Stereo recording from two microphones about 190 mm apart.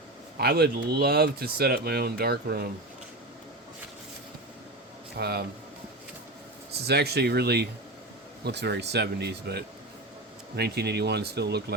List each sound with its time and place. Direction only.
0.3 s speech: 55° right (ahead or behind)
5.1 s speech: 60° right (ahead or behind)
6.8 s speech: 60° right (ahead or behind)